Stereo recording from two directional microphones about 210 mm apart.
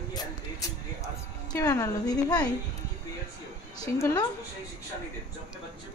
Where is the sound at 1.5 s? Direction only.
15° left (ahead or behind).